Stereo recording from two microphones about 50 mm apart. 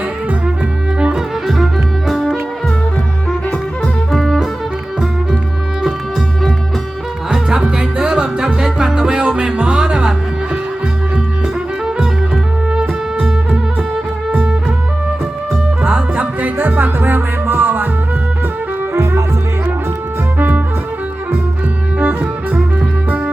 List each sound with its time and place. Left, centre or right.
0.9 s music: centre
1.5 s music: centre
4.1 s music: centre
7.3 s music: centre
13.1 s music: centre
15.8 s music: right
21.9 s music: right